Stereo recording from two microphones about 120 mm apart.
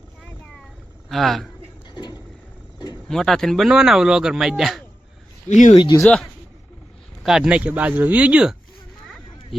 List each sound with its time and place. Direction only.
1.1 s speech: centre (ahead or behind)
2.7 s roaring cats: 35° left (ahead or behind)
3.1 s speech: 5° left (ahead or behind)
5.5 s speech: 90° left
5.7 s speech: 35° left (ahead or behind)
6.0 s speech: 5° left (ahead or behind)